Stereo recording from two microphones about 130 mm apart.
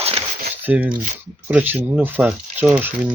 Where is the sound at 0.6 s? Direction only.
10° right (ahead or behind).